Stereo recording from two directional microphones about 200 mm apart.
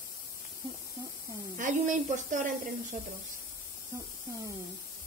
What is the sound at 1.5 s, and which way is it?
Speech, 40° right (ahead or behind).